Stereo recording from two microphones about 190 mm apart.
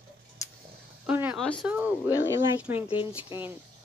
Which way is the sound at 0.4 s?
15° left (ahead or behind).